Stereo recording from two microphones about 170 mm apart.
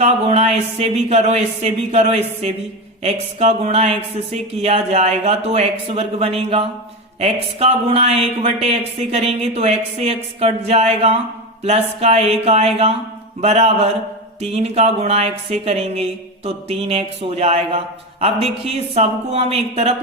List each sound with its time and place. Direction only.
0.0 s speech: 40° right (ahead or behind)